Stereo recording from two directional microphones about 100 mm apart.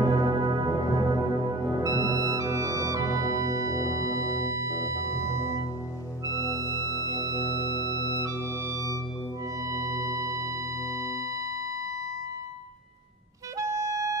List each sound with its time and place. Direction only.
0.0 s music: 45° right (ahead or behind)
1.7 s organ: 35° right (ahead or behind)
4.4 s music: 30° right (ahead or behind)
6.2 s music: 35° left (ahead or behind)
7.3 s organ: 35° left (ahead or behind)
8.2 s organ: 30° right (ahead or behind)
8.7 s music: 40° left (ahead or behind)
9.6 s music: 35° right (ahead or behind)
13.6 s music: 30° right (ahead or behind)